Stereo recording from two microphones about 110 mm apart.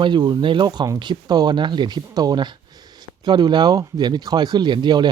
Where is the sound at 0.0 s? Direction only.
45° right (ahead or behind).